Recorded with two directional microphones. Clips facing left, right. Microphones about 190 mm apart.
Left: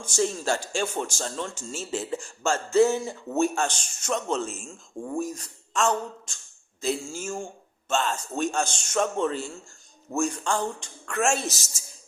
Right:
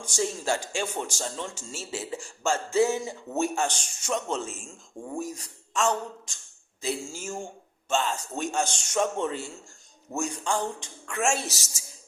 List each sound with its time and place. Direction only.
0.0 s a man's voice: 15° right (ahead or behind)